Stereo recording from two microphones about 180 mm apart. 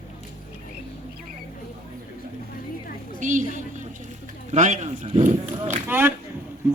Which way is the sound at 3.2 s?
45° right (ahead or behind).